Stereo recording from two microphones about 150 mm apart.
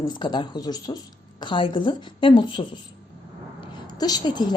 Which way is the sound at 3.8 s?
25° left (ahead or behind).